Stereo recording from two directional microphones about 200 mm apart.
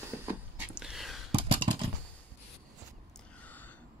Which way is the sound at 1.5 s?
25° right (ahead or behind).